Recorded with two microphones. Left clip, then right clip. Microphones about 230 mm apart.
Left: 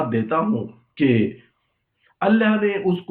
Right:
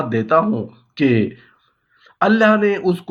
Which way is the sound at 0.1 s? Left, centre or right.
Right.